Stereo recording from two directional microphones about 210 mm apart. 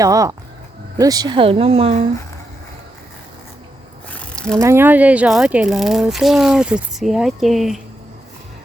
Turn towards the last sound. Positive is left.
turn(degrees=0)  # may be behind; listen again after turning